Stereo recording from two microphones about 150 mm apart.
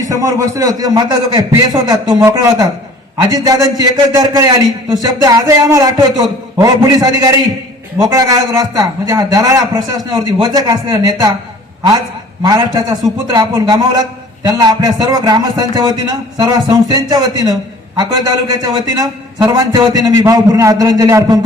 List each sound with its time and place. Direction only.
0.0 s a man's voice: 25° right (ahead or behind)